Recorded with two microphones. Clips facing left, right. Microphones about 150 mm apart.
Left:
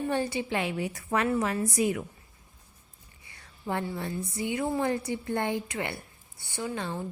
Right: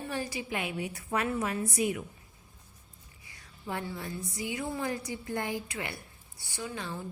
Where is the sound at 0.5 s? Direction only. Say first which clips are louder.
Left 4 dB; 90° left.